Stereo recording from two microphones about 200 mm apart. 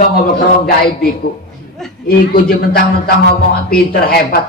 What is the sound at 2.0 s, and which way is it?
Speech, 50° left (ahead or behind).